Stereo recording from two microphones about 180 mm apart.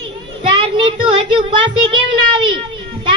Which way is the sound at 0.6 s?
30° right (ahead or behind).